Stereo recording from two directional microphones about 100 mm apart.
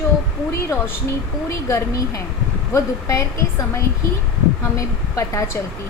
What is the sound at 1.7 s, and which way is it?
A woman's voice, 30° left (ahead or behind).